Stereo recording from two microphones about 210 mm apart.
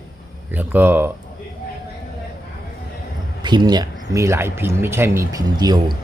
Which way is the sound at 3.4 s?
20° right (ahead or behind).